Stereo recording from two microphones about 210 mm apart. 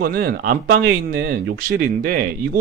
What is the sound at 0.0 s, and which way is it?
Speech, 45° right (ahead or behind).